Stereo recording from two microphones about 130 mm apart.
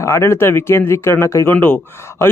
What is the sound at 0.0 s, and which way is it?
Speech, 20° left (ahead or behind).